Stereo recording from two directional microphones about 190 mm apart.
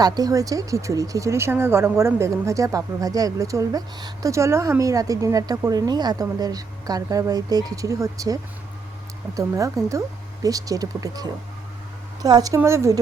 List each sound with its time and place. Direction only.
0.0 s speech: 20° right (ahead or behind)